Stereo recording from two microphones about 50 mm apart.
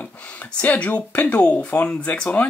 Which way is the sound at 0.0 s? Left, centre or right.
Left.